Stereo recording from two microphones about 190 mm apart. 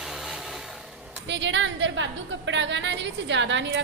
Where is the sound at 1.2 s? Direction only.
70° right (ahead or behind).